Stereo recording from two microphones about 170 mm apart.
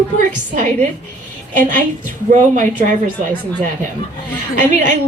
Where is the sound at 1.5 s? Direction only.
50° right (ahead or behind).